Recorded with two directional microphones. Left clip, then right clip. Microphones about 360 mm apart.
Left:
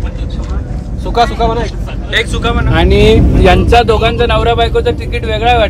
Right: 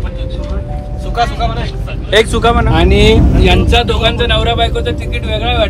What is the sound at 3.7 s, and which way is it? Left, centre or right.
Speech, centre.